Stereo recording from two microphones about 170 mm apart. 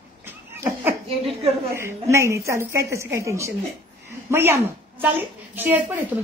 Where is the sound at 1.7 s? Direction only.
15° right (ahead or behind).